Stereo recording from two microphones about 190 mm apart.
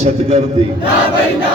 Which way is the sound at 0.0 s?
35° right (ahead or behind).